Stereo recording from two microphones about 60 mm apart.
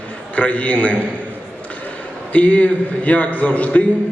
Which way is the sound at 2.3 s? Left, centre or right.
Left.